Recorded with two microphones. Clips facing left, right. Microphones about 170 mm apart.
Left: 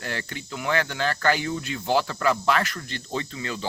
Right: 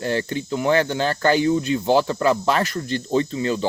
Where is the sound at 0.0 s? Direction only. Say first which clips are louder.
Right 10 dB; 30° right (ahead or behind).